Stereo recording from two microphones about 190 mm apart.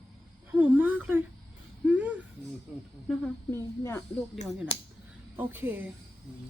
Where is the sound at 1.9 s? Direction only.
5° right (ahead or behind).